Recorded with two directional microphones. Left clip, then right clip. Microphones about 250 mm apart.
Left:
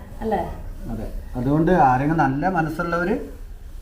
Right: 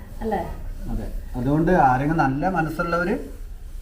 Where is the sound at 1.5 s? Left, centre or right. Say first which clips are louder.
Left 1 dB; centre.